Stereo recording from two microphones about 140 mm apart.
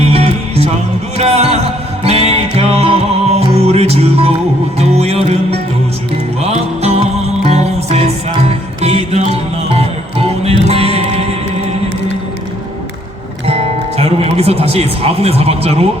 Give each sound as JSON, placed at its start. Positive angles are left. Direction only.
{"t": 0.0, "sound": "music", "side_deg": -45}
{"t": 13.5, "sound": "music", "side_deg": -45}